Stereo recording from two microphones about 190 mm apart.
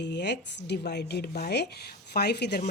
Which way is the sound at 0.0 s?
65° left (ahead or behind).